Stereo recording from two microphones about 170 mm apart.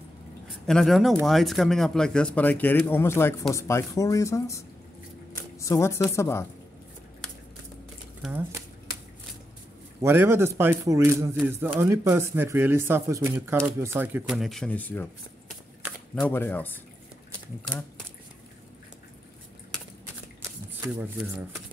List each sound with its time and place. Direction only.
0.7 s speech: centre (ahead or behind)
8.2 s speech: 10° right (ahead or behind)
10.0 s speech: 15° right (ahead or behind); by 15.0 s 10° left (ahead or behind)
16.2 s speech: 10° left (ahead or behind)
20.8 s speech: 10° right (ahead or behind)